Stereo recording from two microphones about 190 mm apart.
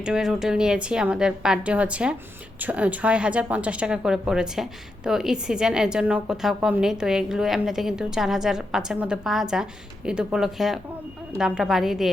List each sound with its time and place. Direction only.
0.0 s a woman's voice: 5° right (ahead or behind)